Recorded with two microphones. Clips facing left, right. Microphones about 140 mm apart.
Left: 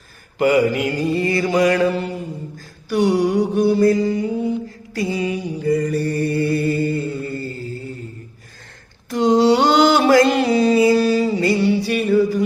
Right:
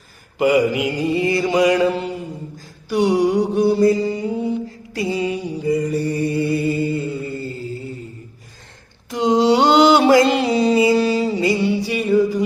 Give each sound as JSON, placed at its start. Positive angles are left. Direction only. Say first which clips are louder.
{"t": 0.3, "sound": "mantra", "louder": "even", "side_deg": -10}
{"t": 9.0, "sound": "mantra", "louder": "left 1 dB", "side_deg": -20}